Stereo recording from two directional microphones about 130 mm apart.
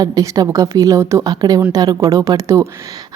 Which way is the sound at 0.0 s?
25° right (ahead or behind).